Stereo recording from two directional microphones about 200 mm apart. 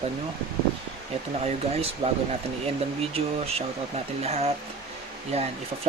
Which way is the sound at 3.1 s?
30° right (ahead or behind).